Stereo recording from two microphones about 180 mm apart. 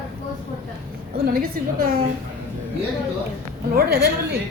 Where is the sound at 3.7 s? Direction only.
60° right (ahead or behind).